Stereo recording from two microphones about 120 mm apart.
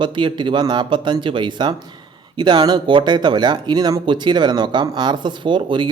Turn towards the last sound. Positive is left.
turn(degrees=-40)  # may be behind; listen again after turning